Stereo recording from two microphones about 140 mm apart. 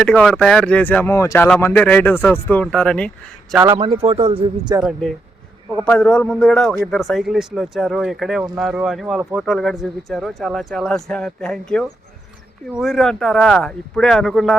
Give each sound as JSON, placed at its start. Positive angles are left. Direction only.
{"t": 0.0, "sound": "speech", "side_deg": 5}
{"t": 1.5, "sound": "speech", "side_deg": 5}
{"t": 3.7, "sound": "a man's voice", "side_deg": -35}
{"t": 4.7, "sound": "speech", "side_deg": -20}
{"t": 5.8, "sound": "speech", "side_deg": 5}